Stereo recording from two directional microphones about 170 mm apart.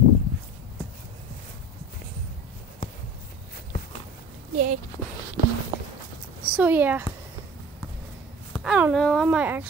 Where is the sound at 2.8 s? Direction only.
60° left (ahead or behind).